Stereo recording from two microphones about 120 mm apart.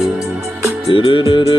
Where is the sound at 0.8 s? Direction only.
50° left (ahead or behind).